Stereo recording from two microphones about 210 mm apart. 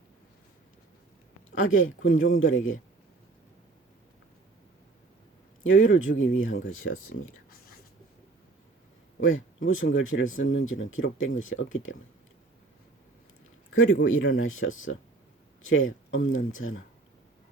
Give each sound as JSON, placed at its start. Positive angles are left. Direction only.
{"t": 1.6, "sound": "speech", "side_deg": 70}
{"t": 5.6, "sound": "speech", "side_deg": 70}
{"t": 9.2, "sound": "speech", "side_deg": 70}
{"t": 13.7, "sound": "speech", "side_deg": 80}